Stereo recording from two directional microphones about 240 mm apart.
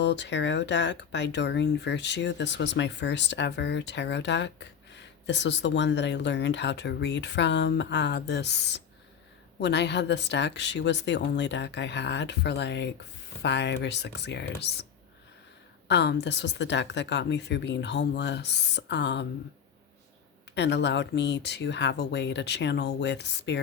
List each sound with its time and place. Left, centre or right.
0.0 s speech: left
15.9 s speech: left
20.6 s speech: left